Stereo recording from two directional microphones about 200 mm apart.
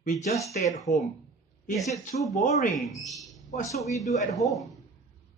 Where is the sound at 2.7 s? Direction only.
Centre (ahead or behind).